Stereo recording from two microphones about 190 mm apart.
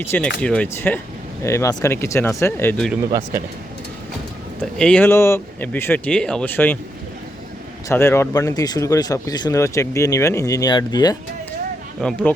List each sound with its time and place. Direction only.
0.0 s speech: 10° left (ahead or behind)
3.1 s speech: 20° right (ahead or behind)
4.6 s speech: 5° left (ahead or behind)
7.9 s speech: 15° left (ahead or behind)
11.9 s speech: 5° left (ahead or behind)